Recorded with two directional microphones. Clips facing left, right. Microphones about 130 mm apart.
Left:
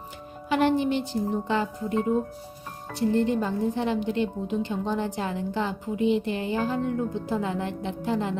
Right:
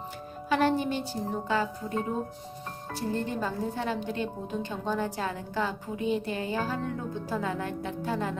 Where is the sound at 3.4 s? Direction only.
15° left (ahead or behind).